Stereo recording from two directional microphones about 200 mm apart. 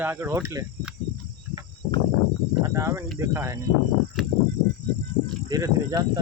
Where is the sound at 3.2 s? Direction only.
10° right (ahead or behind).